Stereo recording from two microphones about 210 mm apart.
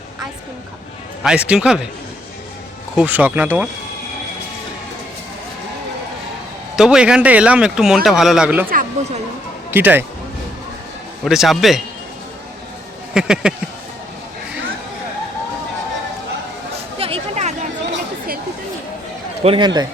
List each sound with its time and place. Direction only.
1.2 s a man's voice: 5° right (ahead or behind)
2.9 s speech: 5° right (ahead or behind)
6.7 s a man's voice: 5° right (ahead or behind)
8.7 s speech: 40° right (ahead or behind)
9.7 s speech: 10° right (ahead or behind)
11.3 s a man's voice: centre (ahead or behind)
13.1 s a man's voice: 5° right (ahead or behind)
17.0 s a sound: 30° right (ahead or behind)
19.4 s a man's voice: 25° right (ahead or behind)